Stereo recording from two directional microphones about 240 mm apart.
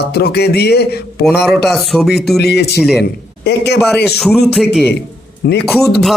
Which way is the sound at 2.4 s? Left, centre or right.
Left.